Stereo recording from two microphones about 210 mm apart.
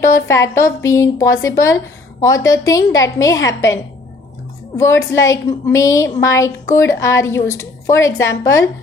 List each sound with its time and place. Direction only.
0.3 s a woman's voice: 15° left (ahead or behind)
4.8 s a woman's voice: 15° left (ahead or behind)